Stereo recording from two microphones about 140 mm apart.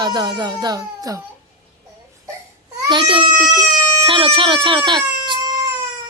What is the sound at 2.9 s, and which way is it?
Speech, 35° right (ahead or behind).